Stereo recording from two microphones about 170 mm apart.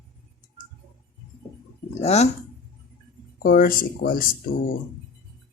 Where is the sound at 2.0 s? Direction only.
40° left (ahead or behind).